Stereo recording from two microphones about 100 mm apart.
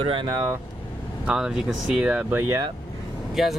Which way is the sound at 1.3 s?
5° right (ahead or behind).